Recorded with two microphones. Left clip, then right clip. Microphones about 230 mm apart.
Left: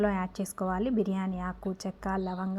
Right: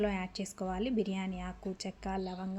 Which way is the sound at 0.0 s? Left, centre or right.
Centre.